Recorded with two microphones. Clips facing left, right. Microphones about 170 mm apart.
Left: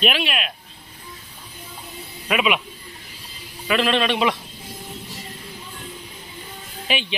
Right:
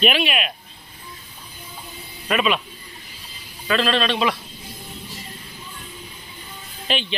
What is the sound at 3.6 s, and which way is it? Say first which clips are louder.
Speech: left 1 dB; 15° left (ahead or behind).